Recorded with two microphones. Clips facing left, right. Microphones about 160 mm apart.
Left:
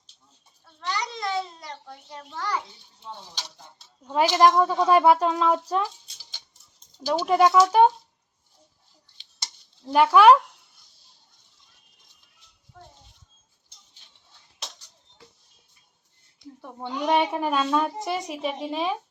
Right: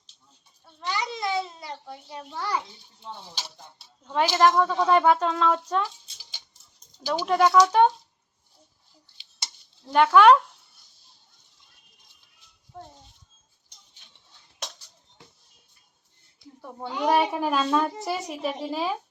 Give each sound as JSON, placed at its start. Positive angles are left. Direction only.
{"t": 0.9, "sound": "babbling", "side_deg": -5}
{"t": 4.0, "sound": "speech", "side_deg": 10}
{"t": 7.2, "sound": "speech", "side_deg": 5}
{"t": 9.8, "sound": "speech", "side_deg": 5}
{"t": 12.7, "sound": "speech", "side_deg": -35}
{"t": 16.6, "sound": "speech", "side_deg": 0}